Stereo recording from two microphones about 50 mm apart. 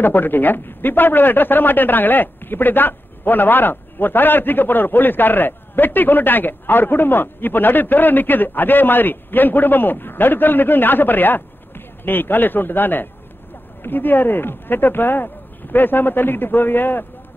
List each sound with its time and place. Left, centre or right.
0.0 s speech: left